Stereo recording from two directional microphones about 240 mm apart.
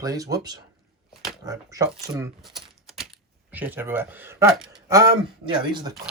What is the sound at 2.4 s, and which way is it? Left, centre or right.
Typing, centre.